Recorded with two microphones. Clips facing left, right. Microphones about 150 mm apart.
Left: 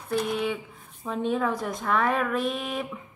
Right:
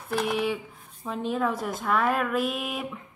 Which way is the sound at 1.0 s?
Centre (ahead or behind).